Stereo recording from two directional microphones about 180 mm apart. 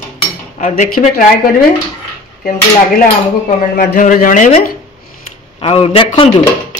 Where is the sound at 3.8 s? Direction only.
50° left (ahead or behind).